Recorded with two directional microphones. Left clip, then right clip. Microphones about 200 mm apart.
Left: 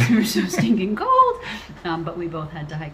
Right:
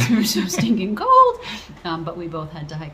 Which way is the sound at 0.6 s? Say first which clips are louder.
Right 4 dB; 25° right (ahead or behind).